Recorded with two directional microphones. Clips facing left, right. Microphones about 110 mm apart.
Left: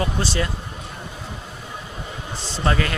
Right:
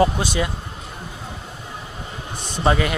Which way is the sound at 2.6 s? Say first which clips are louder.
Right 3 dB; 15° right (ahead or behind).